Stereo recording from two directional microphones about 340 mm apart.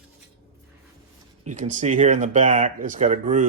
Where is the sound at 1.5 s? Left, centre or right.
Right.